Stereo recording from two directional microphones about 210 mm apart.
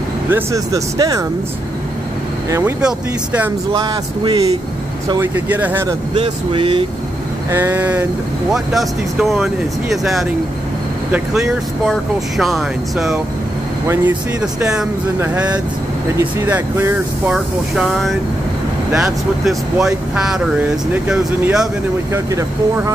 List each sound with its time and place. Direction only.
0.3 s speech: 15° right (ahead or behind)
2.5 s speech: 10° right (ahead or behind)
3.7 s speech: 20° right (ahead or behind)
5.1 s speech: 10° right (ahead or behind)
6.1 s speech: 25° right (ahead or behind)
7.5 s speech: 10° right (ahead or behind)